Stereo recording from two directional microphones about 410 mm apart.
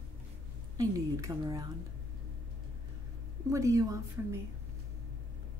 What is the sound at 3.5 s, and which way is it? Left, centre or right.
Speech, centre.